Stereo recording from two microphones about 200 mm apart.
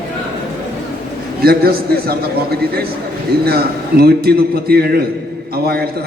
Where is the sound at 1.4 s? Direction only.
50° right (ahead or behind).